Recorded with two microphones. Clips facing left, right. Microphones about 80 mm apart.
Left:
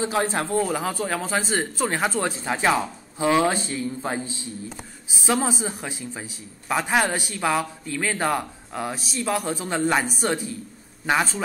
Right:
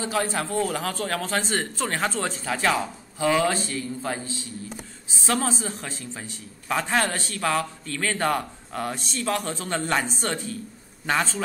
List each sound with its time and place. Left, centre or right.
0.0 s a man's voice: left